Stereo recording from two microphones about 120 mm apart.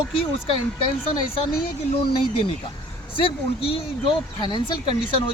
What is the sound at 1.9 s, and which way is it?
Speech, 50° left (ahead or behind).